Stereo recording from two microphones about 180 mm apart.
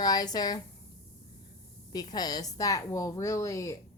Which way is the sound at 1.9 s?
20° left (ahead or behind).